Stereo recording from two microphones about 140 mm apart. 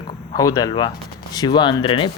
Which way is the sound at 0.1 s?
25° left (ahead or behind).